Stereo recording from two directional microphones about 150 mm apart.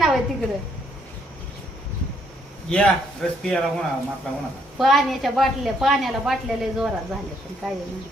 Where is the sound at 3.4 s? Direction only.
5° left (ahead or behind).